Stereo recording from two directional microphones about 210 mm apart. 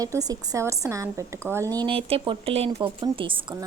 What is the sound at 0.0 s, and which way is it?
A woman's voice, 15° right (ahead or behind).